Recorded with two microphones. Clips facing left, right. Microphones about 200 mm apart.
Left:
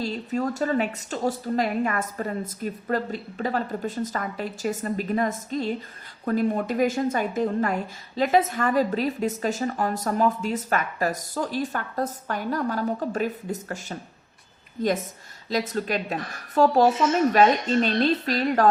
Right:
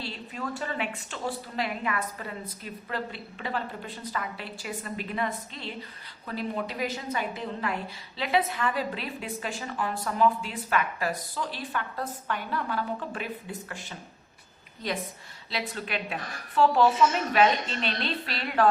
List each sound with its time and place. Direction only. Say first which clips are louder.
0.0 s a woman's voice: left 9 dB; 40° left (ahead or behind)